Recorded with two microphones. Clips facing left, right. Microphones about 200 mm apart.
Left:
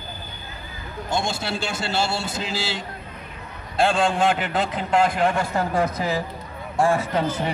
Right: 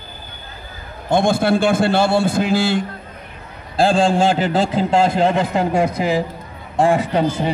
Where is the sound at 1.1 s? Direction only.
55° right (ahead or behind).